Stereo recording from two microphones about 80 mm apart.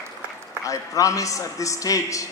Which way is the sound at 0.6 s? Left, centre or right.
Left.